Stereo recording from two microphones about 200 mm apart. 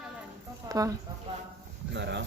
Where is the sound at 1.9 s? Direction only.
60° right (ahead or behind).